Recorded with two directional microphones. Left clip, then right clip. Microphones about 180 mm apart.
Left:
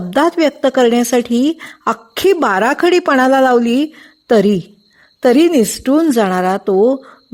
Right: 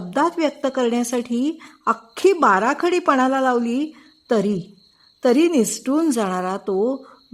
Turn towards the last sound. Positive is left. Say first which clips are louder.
# left 9 dB
turn(degrees=30)  # may be behind; listen again after turning